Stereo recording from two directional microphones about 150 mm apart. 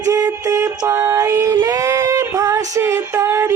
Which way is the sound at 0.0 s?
20° right (ahead or behind).